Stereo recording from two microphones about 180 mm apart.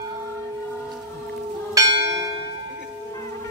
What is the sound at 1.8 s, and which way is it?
Church bell, 20° right (ahead or behind).